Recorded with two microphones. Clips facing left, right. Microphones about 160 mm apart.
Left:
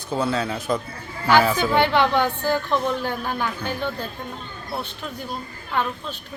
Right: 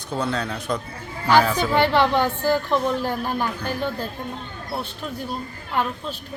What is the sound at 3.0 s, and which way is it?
Speech, 35° right (ahead or behind).